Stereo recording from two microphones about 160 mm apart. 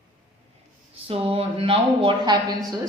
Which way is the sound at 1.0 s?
35° right (ahead or behind).